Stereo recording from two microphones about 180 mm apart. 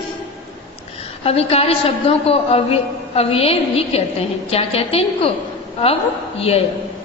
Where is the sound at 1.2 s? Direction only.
35° left (ahead or behind).